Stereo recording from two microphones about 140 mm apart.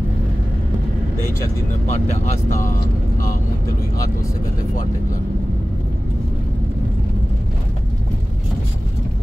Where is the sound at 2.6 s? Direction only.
75° left (ahead or behind).